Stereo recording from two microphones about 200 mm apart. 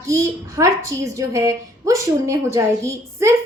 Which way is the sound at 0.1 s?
15° right (ahead or behind).